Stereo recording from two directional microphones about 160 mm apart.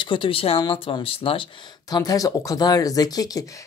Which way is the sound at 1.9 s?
25° left (ahead or behind).